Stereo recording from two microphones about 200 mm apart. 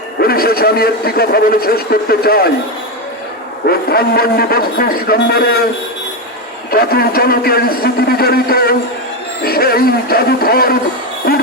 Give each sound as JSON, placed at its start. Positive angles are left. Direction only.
{"t": 0.2, "sound": "a man's voice", "side_deg": 50}
{"t": 3.7, "sound": "a man's voice", "side_deg": 50}
{"t": 6.7, "sound": "a man's voice", "side_deg": 50}